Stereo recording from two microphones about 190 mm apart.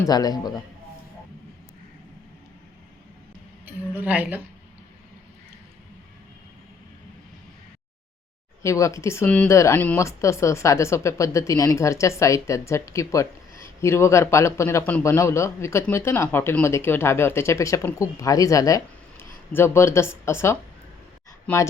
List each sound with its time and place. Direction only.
0.0 s a man's voice: 20° left (ahead or behind)
3.7 s a woman's voice: 10° right (ahead or behind)
8.6 s speech: 15° left (ahead or behind)